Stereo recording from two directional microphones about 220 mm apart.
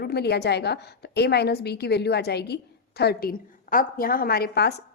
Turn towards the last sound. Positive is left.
turn(degrees=45)  # may be behind; listen again after turning